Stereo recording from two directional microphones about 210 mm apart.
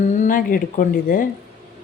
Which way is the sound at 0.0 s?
35° left (ahead or behind).